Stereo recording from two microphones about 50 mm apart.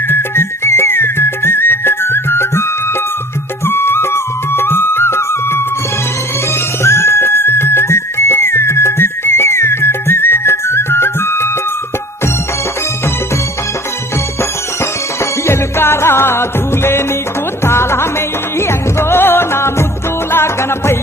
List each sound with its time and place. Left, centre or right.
0.1 s music: left
3.7 s music: left
6.8 s music: left
14.8 s music: left